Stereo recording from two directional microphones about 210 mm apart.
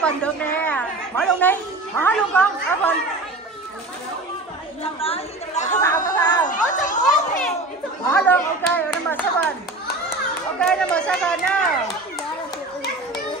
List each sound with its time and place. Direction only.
0.0 s speech: 5° left (ahead or behind)
5.0 s a woman's voice: 30° left (ahead or behind)
5.8 s a sound: 15° left (ahead or behind)
6.7 s children playing: 35° left (ahead or behind)
8.1 s speech: 10° left (ahead or behind)
10.6 s speech: 5° left (ahead or behind)